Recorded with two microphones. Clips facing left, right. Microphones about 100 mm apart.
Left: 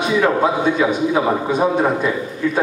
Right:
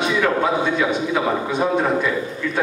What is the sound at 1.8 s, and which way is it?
Speech, 15° left (ahead or behind).